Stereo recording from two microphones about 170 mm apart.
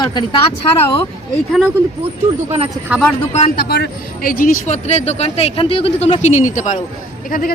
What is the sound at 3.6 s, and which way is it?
Speech, 70° left (ahead or behind).